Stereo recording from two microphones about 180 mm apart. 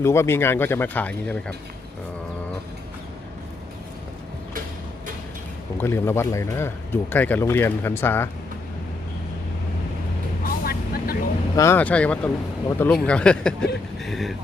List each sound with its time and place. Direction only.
0.0 s a man's voice: 15° left (ahead or behind)
5.7 s a man's voice: 15° left (ahead or behind)
10.4 s vehicle: 55° left (ahead or behind)
11.5 s a man's voice: 15° left (ahead or behind)